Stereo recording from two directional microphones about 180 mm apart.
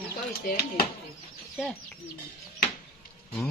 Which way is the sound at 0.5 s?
60° left (ahead or behind).